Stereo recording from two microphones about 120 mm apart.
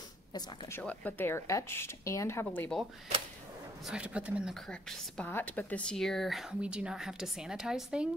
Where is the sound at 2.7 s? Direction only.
Centre (ahead or behind).